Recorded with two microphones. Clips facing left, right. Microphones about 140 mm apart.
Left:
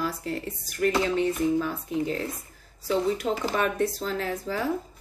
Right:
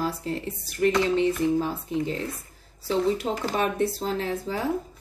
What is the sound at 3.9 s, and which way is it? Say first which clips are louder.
Speech: right 2 dB; 30° right (ahead or behind).